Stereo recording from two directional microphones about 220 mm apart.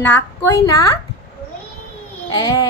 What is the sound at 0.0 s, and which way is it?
Speech, 10° left (ahead or behind).